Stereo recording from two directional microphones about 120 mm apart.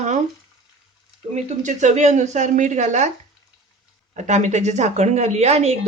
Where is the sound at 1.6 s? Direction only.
85° right.